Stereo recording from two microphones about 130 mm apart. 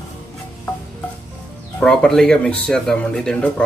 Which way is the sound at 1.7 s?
5° left (ahead or behind).